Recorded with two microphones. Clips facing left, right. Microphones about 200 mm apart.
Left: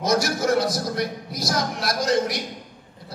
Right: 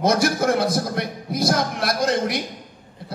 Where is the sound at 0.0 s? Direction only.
55° right (ahead or behind).